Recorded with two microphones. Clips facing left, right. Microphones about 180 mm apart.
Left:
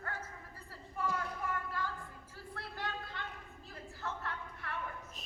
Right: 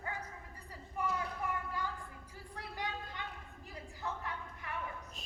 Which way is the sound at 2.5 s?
15° right (ahead or behind).